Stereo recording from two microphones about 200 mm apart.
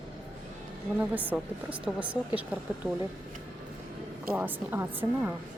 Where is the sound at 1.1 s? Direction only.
10° right (ahead or behind).